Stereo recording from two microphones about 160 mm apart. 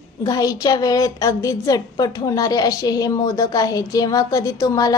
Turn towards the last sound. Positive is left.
turn(degrees=20)  # may be behind; listen again after turning